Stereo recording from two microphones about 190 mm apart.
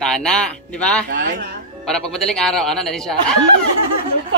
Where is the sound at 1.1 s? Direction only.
45° right (ahead or behind).